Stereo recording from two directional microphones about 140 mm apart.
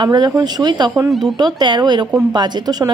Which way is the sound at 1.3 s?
30° right (ahead or behind).